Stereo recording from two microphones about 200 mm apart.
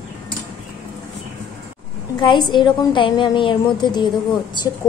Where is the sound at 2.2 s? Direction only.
20° left (ahead or behind).